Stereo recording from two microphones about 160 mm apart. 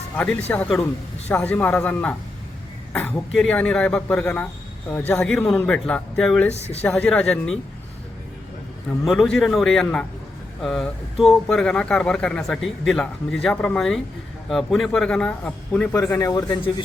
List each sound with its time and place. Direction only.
0.5 s a man's voice: 5° left (ahead or behind)
6.5 s speech: 40° left (ahead or behind)
6.8 s a man's voice: 10° left (ahead or behind)
9.0 s speech: centre (ahead or behind)
16.0 s speech: 20° left (ahead or behind)